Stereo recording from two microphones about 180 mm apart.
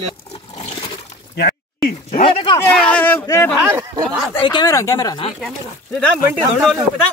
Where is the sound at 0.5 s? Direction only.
40° left (ahead or behind).